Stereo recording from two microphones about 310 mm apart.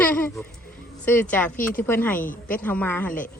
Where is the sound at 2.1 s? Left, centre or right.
Left.